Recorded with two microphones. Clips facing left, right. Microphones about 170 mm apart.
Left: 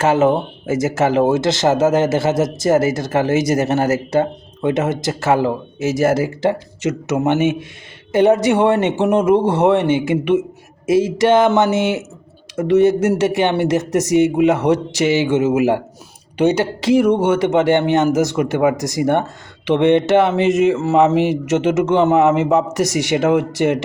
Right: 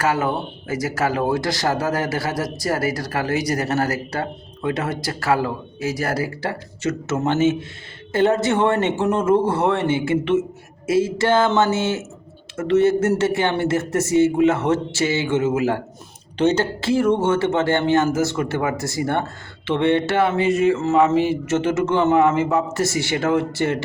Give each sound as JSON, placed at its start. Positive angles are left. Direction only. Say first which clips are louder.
{"t": 0.0, "sound": "speech", "louder": "left 7 dB", "side_deg": 25}